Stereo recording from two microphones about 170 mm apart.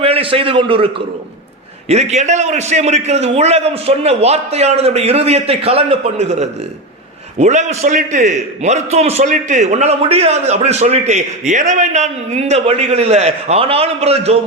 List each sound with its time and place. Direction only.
0.0 s a man's voice: 35° right (ahead or behind)